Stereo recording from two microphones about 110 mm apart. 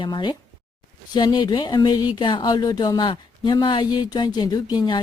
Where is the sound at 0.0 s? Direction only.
45° left (ahead or behind).